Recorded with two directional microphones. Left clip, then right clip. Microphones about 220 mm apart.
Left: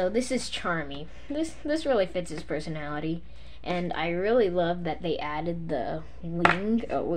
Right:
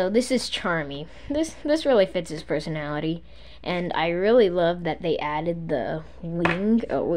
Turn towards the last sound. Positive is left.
turn(degrees=-35)  # may be behind; listen again after turning